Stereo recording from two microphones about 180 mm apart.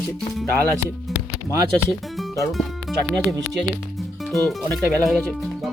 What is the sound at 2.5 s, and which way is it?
Speech, centre (ahead or behind).